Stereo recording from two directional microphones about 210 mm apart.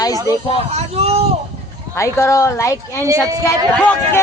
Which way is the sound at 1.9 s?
15° left (ahead or behind).